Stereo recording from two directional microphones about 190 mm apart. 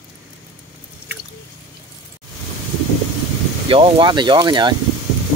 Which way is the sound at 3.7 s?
25° right (ahead or behind).